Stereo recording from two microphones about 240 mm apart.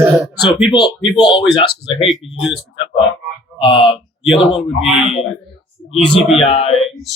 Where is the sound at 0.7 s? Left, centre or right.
Centre.